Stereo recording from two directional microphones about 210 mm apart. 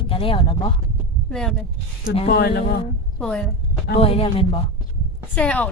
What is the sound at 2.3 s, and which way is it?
Speech, 45° left (ahead or behind).